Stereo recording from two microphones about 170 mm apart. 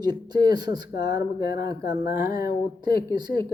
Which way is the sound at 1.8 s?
60° left (ahead or behind).